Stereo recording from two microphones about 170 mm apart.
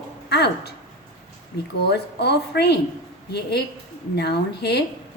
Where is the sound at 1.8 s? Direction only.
75° left (ahead or behind).